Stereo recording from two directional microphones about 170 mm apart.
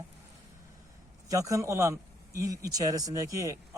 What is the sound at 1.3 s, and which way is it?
A man's voice, 20° right (ahead or behind).